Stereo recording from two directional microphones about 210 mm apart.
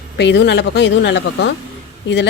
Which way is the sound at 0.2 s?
55° left (ahead or behind).